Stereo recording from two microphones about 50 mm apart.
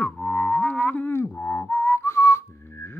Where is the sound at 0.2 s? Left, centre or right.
Left.